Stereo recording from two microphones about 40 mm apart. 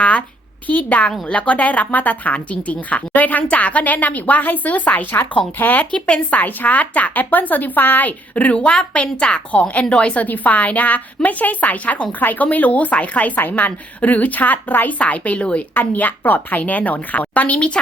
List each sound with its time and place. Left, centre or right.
0.0 s a sound: left
0.7 s speech: left
5.9 s speech: left
6.4 s speech: left
8.5 s a woman's voice: left
9.9 s a woman's voice: left
10.2 s speech: left
14.9 s speech: left